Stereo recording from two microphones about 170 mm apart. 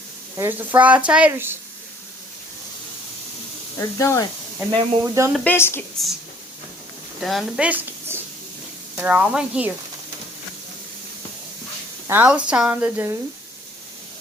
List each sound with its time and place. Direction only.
0.3 s speech: 10° right (ahead or behind)
3.8 s speech: 20° left (ahead or behind)
4.7 s speech: 20° right (ahead or behind)
5.3 s a woman's voice: 5° left (ahead or behind)
7.2 s a woman's voice: centre (ahead or behind)
12.0 s speech: 10° right (ahead or behind)